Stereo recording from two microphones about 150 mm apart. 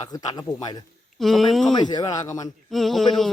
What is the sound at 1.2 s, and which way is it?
Speech, centre (ahead or behind).